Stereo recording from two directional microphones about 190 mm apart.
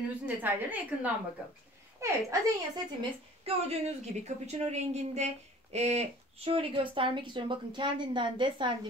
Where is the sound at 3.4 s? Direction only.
35° right (ahead or behind).